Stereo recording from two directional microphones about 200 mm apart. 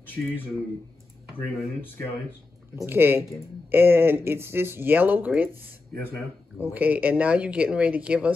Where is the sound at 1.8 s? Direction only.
10° left (ahead or behind).